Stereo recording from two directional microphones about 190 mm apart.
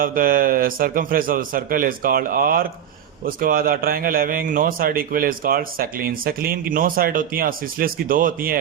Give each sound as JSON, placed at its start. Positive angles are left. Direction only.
{"t": 0.0, "sound": "a man's voice", "side_deg": -50}